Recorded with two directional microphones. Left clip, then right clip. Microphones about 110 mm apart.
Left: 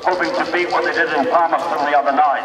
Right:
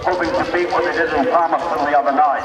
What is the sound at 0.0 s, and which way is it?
A man's voice, 10° left (ahead or behind).